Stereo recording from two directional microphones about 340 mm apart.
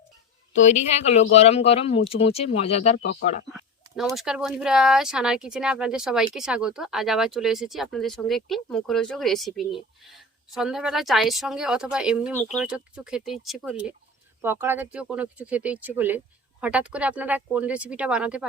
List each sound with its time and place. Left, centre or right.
0.6 s speech: centre
3.9 s speech: centre